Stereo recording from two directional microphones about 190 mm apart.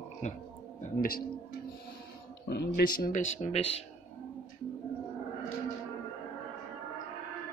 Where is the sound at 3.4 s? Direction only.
30° left (ahead or behind).